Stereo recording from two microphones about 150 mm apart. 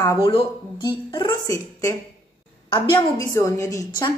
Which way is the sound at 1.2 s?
20° left (ahead or behind).